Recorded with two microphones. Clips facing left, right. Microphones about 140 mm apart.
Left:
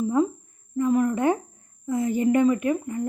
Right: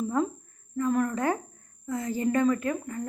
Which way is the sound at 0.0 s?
10° left (ahead or behind).